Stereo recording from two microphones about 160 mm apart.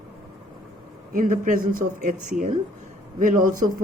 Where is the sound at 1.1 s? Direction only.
55° right (ahead or behind).